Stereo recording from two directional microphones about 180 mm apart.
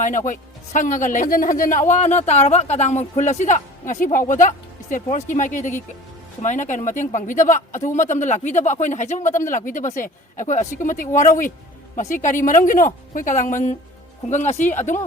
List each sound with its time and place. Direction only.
0.3 s a man's voice: 45° left (ahead or behind)